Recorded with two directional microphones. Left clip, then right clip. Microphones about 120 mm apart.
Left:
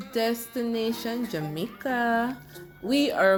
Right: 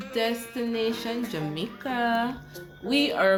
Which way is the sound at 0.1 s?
55° left (ahead or behind).